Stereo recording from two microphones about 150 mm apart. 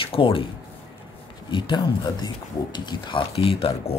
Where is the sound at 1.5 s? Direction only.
30° left (ahead or behind).